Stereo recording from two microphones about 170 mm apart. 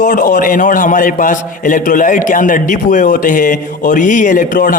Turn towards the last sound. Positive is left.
turn(degrees=50)  # may be behind; listen again after turning